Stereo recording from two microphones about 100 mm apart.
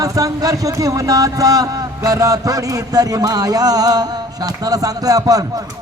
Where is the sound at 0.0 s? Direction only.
35° right (ahead or behind).